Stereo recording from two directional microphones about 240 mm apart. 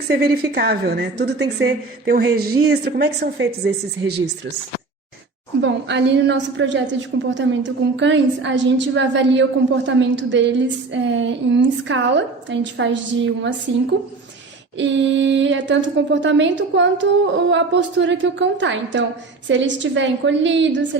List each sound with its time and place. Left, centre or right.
0.1 s a woman's voice: right
5.6 s a woman's voice: right
14.8 s a woman's voice: right